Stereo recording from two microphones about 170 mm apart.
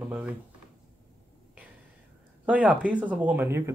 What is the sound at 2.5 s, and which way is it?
Speech, 5° right (ahead or behind).